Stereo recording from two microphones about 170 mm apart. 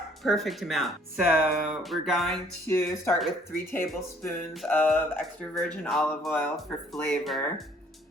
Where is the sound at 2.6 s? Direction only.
15° left (ahead or behind); by 7.7 s centre (ahead or behind).